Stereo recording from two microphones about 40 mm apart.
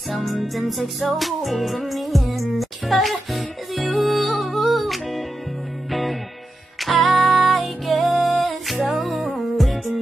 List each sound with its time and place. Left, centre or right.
0.1 s music: centre